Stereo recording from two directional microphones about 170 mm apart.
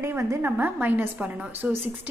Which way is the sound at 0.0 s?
15° right (ahead or behind).